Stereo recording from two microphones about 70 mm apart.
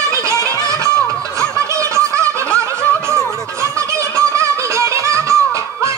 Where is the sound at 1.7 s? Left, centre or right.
Right.